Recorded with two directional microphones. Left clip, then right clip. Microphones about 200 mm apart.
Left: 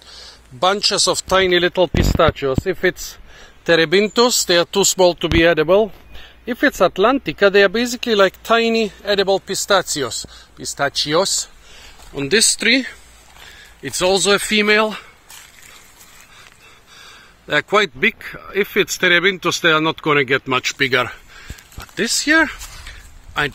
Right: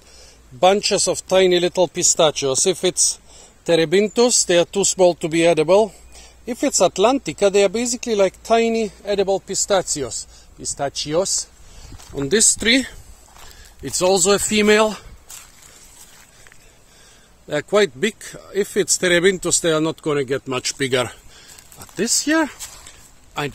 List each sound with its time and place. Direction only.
0.6 s a man's voice: 5° right (ahead or behind)
2.2 s speech: 20° left (ahead or behind)
3.6 s a man's voice: 10° right (ahead or behind)
12.5 s speech: 20° right (ahead or behind)
17.5 s a man's voice: centre (ahead or behind)
20.6 s speech: 15° right (ahead or behind)
21.9 s speech: 25° right (ahead or behind)
22.8 s a sound: 10° right (ahead or behind)